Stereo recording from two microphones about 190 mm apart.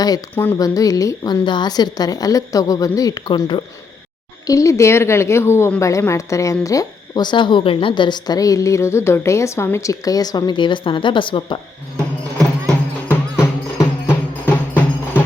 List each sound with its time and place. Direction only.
0.0 s a woman's voice: 15° left (ahead or behind)
12.6 s music: 10° right (ahead or behind)
13.4 s music: 10° left (ahead or behind)